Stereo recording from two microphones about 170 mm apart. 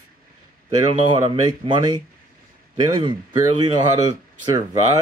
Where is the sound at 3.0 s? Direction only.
30° right (ahead or behind).